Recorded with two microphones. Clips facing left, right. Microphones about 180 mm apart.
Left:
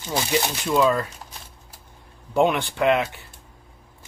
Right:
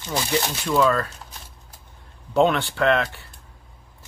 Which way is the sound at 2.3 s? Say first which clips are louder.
Right 1 dB; 10° left (ahead or behind).